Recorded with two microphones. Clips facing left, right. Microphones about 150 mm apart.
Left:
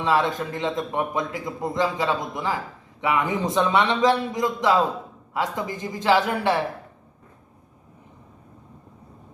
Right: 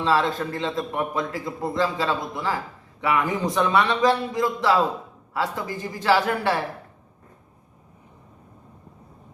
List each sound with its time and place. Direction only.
0.0 s a man's voice: 20° left (ahead or behind)